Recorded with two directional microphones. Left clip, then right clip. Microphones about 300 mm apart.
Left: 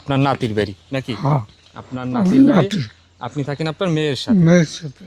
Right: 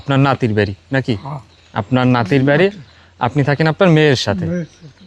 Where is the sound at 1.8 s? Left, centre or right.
Right.